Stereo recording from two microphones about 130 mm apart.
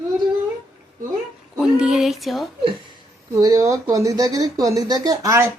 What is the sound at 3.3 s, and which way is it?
Speech, 25° right (ahead or behind).